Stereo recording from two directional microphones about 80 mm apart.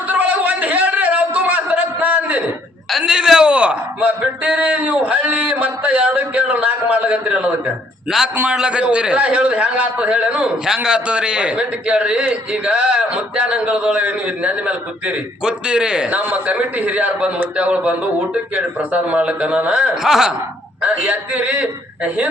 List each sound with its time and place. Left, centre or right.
0.1 s a sound: right
3.0 s a man's voice: centre
20.8 s a man's voice: centre